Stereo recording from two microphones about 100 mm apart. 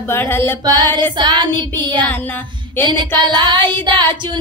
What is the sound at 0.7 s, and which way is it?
Female singing, 45° right (ahead or behind).